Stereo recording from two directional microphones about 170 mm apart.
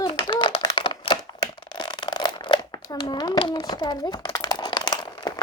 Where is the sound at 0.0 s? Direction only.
25° left (ahead or behind).